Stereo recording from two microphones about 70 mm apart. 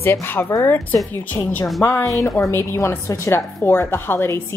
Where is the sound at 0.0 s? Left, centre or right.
Left.